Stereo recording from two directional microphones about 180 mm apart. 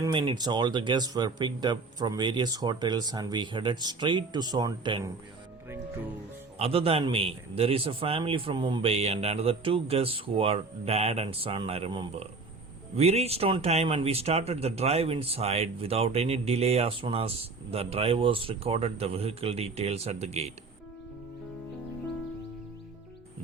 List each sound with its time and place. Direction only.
0.0 s speech: 25° right (ahead or behind)
5.6 s speech: 15° right (ahead or behind)
6.6 s speech: 30° right (ahead or behind)